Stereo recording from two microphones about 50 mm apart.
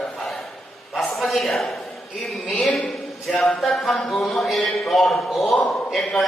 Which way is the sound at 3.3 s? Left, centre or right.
Left.